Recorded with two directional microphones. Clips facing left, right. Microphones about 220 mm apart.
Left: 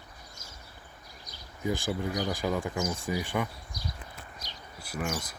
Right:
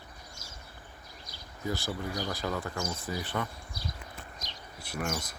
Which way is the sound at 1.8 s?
15° left (ahead or behind).